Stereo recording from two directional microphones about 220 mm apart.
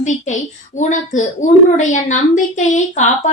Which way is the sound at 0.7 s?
35° left (ahead or behind).